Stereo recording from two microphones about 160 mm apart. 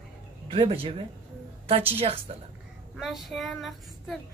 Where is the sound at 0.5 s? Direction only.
35° right (ahead or behind).